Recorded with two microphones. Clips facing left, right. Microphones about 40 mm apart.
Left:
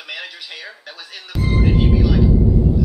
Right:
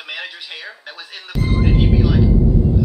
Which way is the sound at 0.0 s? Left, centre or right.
Centre.